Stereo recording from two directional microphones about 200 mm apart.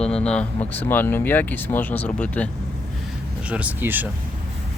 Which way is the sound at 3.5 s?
10° right (ahead or behind).